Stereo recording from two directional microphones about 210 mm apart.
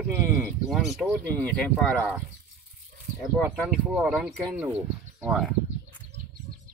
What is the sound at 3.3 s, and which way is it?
Speech, 5° right (ahead or behind).